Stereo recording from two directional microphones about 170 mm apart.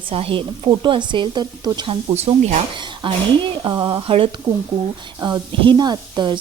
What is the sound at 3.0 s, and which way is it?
A woman's voice, 30° right (ahead or behind).